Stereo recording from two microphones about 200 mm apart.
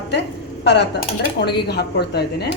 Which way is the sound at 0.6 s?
55° left (ahead or behind).